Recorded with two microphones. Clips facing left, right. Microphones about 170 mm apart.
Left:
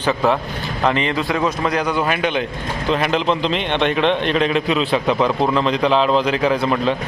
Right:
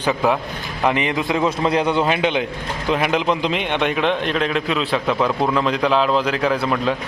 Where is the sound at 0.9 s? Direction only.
15° right (ahead or behind).